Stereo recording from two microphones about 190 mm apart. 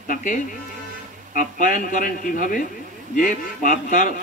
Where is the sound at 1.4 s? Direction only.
45° left (ahead or behind).